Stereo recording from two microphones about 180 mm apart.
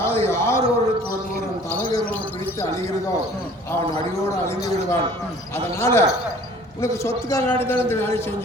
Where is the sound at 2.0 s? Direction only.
10° left (ahead or behind).